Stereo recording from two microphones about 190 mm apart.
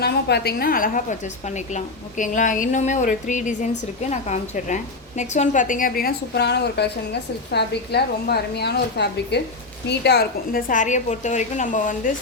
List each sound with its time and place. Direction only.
0.0 s a woman's voice: 60° left (ahead or behind); by 12.1 s 40° left (ahead or behind)